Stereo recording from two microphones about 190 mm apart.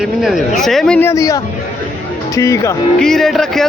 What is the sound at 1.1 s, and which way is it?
A man's voice, 15° left (ahead or behind).